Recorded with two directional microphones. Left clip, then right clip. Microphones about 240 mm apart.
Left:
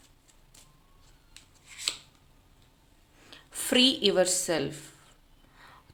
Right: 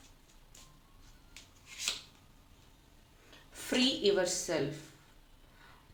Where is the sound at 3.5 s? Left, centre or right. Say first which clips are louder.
Left 8 dB; left.